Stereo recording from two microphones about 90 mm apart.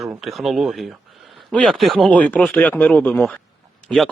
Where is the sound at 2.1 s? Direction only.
15° left (ahead or behind).